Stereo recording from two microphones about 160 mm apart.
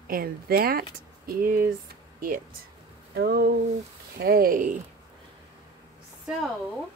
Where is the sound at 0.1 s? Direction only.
70° right (ahead or behind).